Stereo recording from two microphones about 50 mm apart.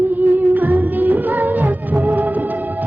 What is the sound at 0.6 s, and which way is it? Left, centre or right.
Music, right.